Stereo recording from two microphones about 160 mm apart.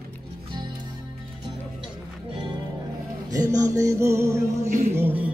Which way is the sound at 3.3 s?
20° right (ahead or behind).